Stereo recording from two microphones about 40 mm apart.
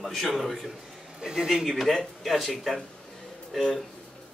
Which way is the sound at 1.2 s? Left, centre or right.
Centre.